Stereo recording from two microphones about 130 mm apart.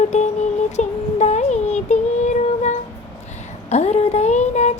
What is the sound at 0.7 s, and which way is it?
Child singing, 60° left (ahead or behind).